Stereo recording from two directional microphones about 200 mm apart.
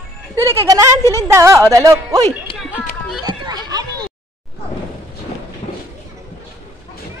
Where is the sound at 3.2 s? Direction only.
20° right (ahead or behind).